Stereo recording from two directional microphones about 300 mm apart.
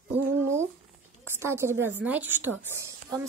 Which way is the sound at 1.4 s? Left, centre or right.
Centre.